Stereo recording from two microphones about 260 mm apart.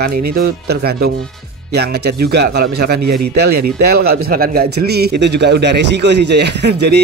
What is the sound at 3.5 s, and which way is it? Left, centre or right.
Speech, right.